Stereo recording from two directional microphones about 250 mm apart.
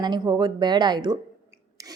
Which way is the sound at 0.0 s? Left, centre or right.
Centre.